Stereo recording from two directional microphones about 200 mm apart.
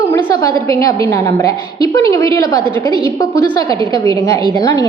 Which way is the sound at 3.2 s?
15° left (ahead or behind).